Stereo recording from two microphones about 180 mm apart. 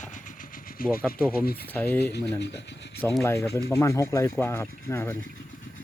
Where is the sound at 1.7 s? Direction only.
10° left (ahead or behind).